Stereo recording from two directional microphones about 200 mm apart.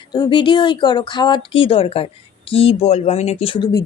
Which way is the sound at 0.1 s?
25° left (ahead or behind).